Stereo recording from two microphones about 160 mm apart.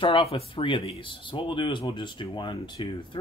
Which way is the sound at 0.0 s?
35° left (ahead or behind).